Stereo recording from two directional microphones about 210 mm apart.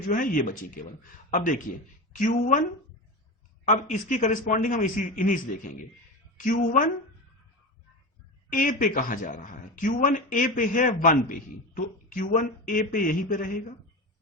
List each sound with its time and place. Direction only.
0.1 s speech: 40° left (ahead or behind)
3.7 s speech: 35° left (ahead or behind)
6.4 s speech: 35° left (ahead or behind)
8.5 s speech: 40° left (ahead or behind)